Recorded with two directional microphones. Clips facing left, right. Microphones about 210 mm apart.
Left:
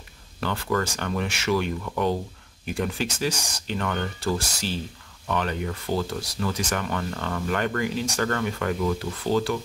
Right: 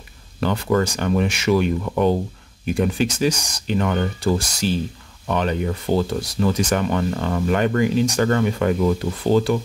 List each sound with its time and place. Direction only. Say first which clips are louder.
0.4 s speech: right 7 dB; 20° right (ahead or behind)